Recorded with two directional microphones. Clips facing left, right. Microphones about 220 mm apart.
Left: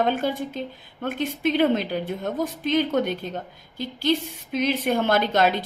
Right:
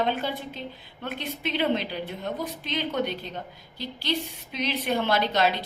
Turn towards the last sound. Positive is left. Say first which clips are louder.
# left 3 dB
turn(degrees=50)  # may be behind; listen again after turning